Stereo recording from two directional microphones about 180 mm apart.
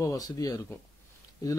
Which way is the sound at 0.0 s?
20° left (ahead or behind).